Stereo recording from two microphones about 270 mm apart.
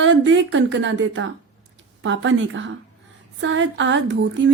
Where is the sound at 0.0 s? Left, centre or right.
Right.